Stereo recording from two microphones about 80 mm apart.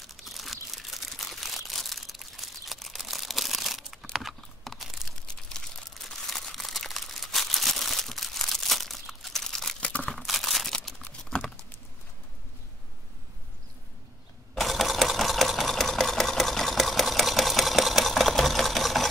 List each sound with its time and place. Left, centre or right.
0.2 s crumpling: centre
9.8 s crumpling: centre
10.1 s crumpling: centre
11.1 s typing: centre
14.5 s sewing machine: centre